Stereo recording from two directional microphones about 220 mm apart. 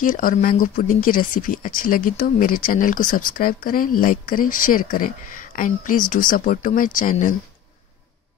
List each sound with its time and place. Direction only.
0.0 s speech: 40° left (ahead or behind)